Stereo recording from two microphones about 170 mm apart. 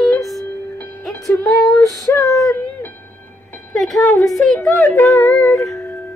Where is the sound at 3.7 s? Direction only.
Centre (ahead or behind).